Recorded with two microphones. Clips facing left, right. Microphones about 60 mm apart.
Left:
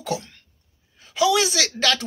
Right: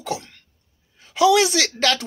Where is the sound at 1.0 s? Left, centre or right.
Right.